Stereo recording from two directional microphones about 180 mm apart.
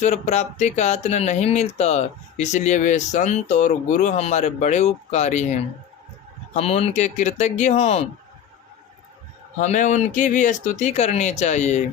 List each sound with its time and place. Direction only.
0.0 s speech: 40° left (ahead or behind)
9.6 s speech: 40° left (ahead or behind)